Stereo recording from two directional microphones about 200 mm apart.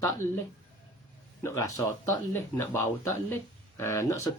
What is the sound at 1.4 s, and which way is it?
Speech, 15° left (ahead or behind).